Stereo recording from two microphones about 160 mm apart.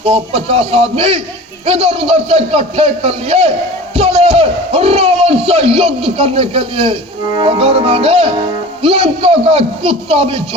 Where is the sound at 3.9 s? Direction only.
40° right (ahead or behind).